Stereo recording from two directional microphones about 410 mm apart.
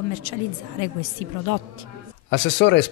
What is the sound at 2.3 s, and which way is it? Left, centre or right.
Speech, left.